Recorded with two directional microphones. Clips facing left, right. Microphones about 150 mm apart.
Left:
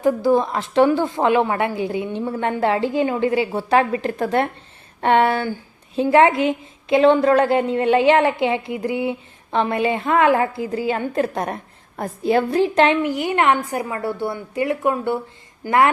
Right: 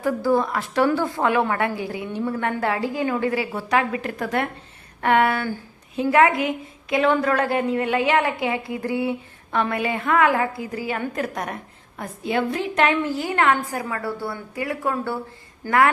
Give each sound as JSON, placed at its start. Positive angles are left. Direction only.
{"t": 0.0, "sound": "a woman's voice", "side_deg": 20}
{"t": 13.0, "sound": "a woman's voice", "side_deg": 15}